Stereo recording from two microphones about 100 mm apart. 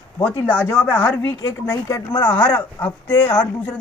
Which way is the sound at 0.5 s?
15° left (ahead or behind).